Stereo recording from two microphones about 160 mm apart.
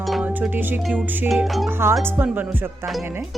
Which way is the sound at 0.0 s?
Centre (ahead or behind).